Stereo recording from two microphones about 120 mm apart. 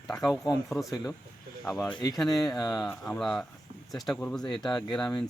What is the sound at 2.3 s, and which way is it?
Speech, 35° left (ahead or behind).